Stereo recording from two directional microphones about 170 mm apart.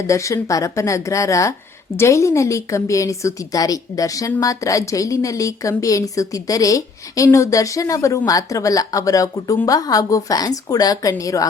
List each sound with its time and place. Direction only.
0.1 s a woman's voice: 20° left (ahead or behind)